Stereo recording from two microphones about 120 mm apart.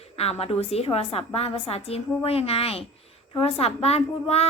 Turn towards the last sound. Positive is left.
turn(degrees=60)  # may be behind; listen again after turning